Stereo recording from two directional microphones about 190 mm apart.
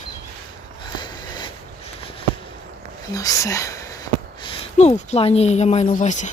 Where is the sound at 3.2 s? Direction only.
15° left (ahead or behind); by 6.3 s 40° left (ahead or behind).